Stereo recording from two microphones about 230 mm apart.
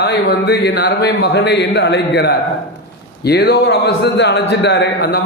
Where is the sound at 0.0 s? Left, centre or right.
Left.